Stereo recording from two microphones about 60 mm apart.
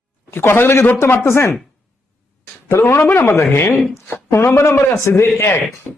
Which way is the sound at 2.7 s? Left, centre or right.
Left.